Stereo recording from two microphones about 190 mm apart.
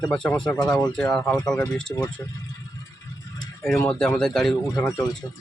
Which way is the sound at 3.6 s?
5° left (ahead or behind).